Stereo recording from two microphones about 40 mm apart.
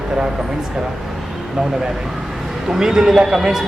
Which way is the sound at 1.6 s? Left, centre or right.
Centre.